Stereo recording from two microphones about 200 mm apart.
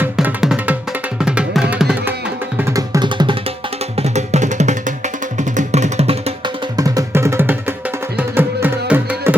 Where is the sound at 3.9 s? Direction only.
35° right (ahead or behind).